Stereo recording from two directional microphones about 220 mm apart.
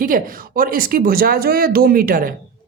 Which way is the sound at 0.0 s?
40° right (ahead or behind).